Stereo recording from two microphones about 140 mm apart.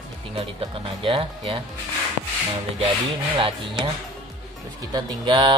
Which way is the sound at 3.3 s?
35° right (ahead or behind).